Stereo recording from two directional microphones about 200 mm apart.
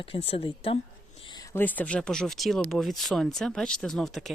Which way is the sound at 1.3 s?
15° left (ahead or behind).